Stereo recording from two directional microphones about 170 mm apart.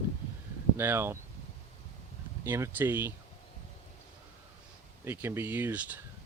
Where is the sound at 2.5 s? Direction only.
15° right (ahead or behind).